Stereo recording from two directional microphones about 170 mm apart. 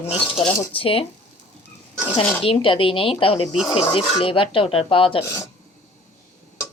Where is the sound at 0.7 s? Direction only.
35° left (ahead or behind).